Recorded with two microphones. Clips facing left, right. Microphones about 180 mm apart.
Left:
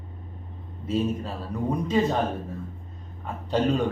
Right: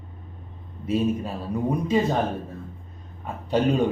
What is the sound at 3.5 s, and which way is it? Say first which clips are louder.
Speech: right 2 dB; 10° right (ahead or behind).